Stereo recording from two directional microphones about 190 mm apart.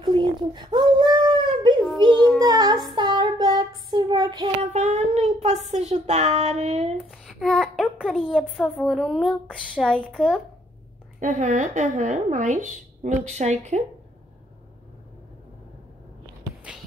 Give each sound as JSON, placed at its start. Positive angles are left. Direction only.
{"t": 0.0, "sound": "a sound", "side_deg": -25}
{"t": 2.0, "sound": "child singing", "side_deg": -20}
{"t": 4.7, "sound": "speech", "side_deg": -35}
{"t": 7.1, "sound": "a child's voice", "side_deg": 0}
{"t": 11.1, "sound": "speech", "side_deg": -40}